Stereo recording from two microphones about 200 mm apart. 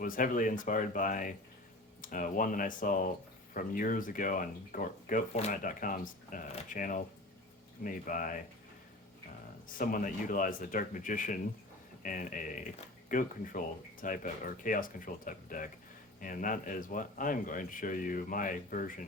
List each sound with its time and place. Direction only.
0.0 s speech: 45° left (ahead or behind)
9.7 s speech: 45° left (ahead or behind)